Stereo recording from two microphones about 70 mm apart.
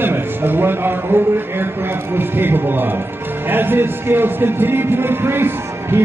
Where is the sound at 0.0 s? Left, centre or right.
Right.